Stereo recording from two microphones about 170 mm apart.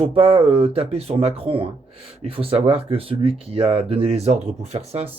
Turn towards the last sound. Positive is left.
turn(degrees=-40)  # may be behind; listen again after turning